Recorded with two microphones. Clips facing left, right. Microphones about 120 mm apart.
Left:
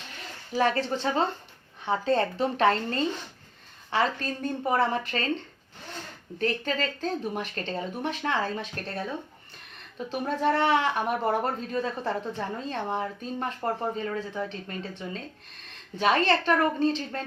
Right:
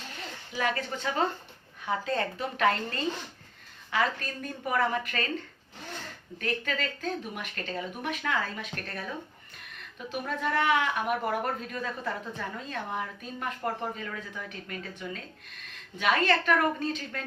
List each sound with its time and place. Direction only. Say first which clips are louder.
0.5 s speech: left 6 dB; 35° left (ahead or behind)
6.4 s speech: left 4 dB; 35° left (ahead or behind)
10.1 s speech: left 5 dB; 30° left (ahead or behind)